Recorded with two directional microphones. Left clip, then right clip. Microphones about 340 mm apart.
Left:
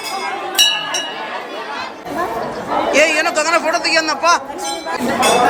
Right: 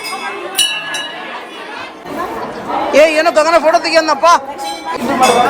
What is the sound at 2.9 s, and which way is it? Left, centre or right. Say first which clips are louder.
A man's voice: right 6 dB; centre.